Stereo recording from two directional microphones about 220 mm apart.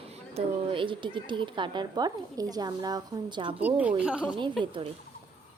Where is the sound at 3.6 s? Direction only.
5° right (ahead or behind).